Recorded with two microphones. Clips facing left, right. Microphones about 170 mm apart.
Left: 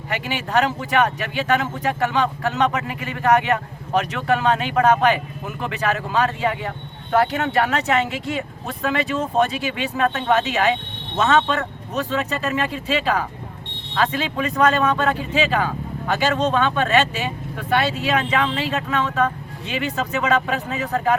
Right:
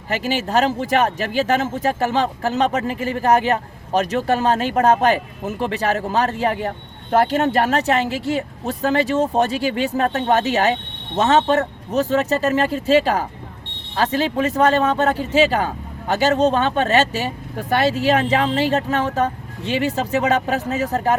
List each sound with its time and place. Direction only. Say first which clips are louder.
0.1 s speech: right 3 dB; 40° right (ahead or behind)